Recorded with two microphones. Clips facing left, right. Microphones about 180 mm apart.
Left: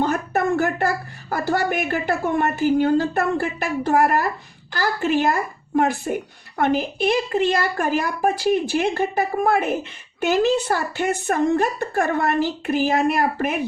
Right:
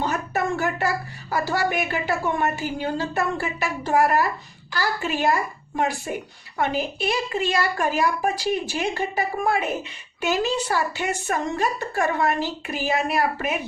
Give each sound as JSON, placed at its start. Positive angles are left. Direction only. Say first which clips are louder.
{"t": 0.0, "sound": "a child's voice", "louder": "left 4 dB", "side_deg": 55}